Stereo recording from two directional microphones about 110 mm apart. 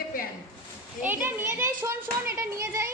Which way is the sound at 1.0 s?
20° right (ahead or behind).